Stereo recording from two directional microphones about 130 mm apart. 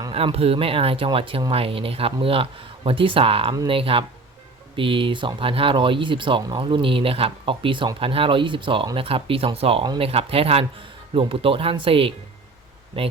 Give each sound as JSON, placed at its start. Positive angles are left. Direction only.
{"t": 0.1, "sound": "speech", "side_deg": -45}